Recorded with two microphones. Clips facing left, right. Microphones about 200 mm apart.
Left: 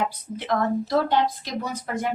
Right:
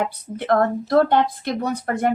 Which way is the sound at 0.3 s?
55° right (ahead or behind).